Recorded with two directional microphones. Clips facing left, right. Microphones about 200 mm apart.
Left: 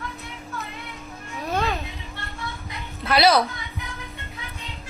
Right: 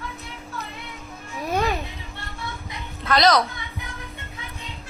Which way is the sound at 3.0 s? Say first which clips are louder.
Even; 10° left (ahead or behind).